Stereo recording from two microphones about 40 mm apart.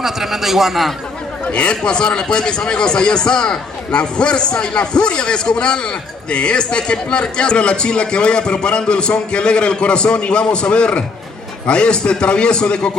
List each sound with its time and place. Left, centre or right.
0.0 s a man's voice: centre
1.5 s a man's voice: left